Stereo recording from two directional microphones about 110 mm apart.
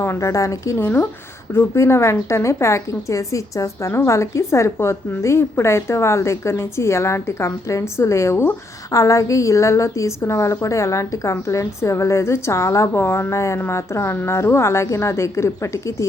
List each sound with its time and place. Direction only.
0.0 s a woman's voice: 25° left (ahead or behind)